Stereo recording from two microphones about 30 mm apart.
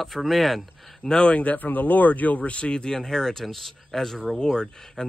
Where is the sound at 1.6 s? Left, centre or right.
Left.